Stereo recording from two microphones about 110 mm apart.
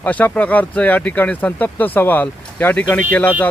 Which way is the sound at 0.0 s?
15° left (ahead or behind).